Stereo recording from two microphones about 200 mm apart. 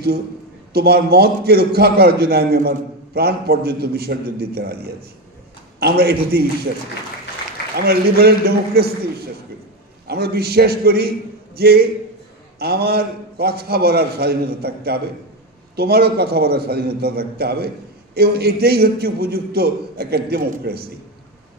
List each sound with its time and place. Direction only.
0.7 s a man's voice: 50° right (ahead or behind)
7.7 s a man's voice: 50° right (ahead or behind)
10.0 s a man's voice: 50° right (ahead or behind)